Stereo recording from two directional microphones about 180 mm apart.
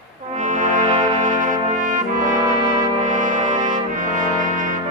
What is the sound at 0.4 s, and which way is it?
Brass instrument, 45° right (ahead or behind).